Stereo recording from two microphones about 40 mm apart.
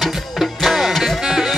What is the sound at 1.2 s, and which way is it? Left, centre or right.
Music, centre.